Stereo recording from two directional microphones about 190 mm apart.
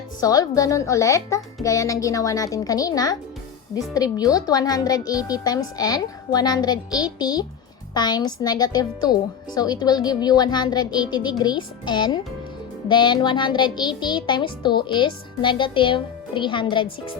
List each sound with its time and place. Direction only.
0.2 s a child's voice: 20° left (ahead or behind)